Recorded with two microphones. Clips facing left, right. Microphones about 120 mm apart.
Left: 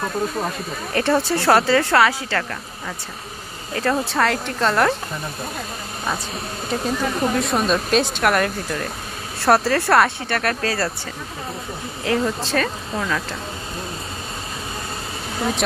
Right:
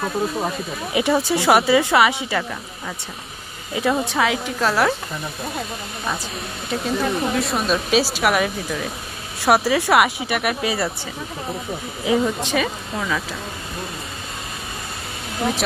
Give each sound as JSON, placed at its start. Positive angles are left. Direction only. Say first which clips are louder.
{"t": 0.0, "sound": "speech", "louder": "right 1 dB", "side_deg": -5}
{"t": 2.0, "sound": "speech", "louder": "even", "side_deg": -20}
{"t": 3.7, "sound": "speech", "louder": "even", "side_deg": -5}
{"t": 6.7, "sound": "speech", "louder": "right 1 dB", "side_deg": 0}
{"t": 12.0, "sound": "speech", "louder": "right 2 dB", "side_deg": -10}
{"t": 12.4, "sound": "speech", "louder": "even", "side_deg": 0}